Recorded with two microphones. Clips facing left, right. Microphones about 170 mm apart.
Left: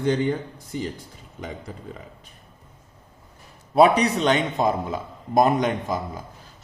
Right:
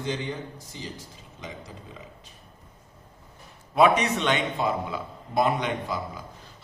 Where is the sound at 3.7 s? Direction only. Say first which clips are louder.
Left 4 dB; 35° left (ahead or behind).